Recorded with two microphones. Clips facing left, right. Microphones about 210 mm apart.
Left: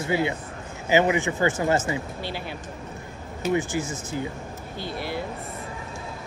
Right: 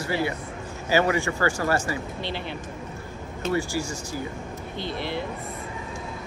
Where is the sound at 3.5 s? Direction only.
20° left (ahead or behind).